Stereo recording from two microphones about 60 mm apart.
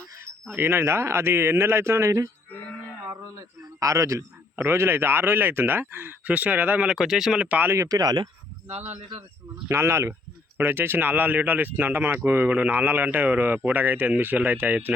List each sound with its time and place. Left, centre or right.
0.4 s speech: right
3.1 s a sound: right
4.5 s speech: right
6.8 s speech: centre
7.3 s speech: right
7.8 s speech: right
9.6 s speech: right